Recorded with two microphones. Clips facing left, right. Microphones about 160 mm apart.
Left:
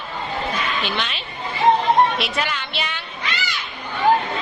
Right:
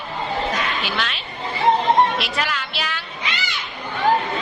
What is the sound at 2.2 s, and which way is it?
Speech, centre (ahead or behind).